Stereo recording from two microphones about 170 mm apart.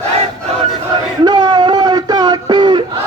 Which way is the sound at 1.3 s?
25° right (ahead or behind).